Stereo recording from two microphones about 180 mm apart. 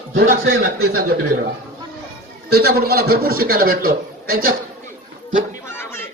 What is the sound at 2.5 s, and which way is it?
A man's voice, 60° right (ahead or behind).